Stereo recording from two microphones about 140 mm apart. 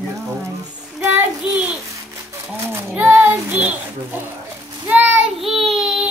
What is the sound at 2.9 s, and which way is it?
Child singing, 10° right (ahead or behind).